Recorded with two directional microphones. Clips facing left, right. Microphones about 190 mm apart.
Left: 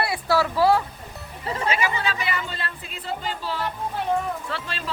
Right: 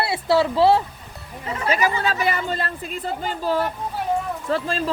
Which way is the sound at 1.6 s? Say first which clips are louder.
Right 4 dB; 40° right (ahead or behind).